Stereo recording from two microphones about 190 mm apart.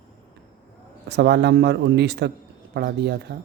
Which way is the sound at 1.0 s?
65° right (ahead or behind).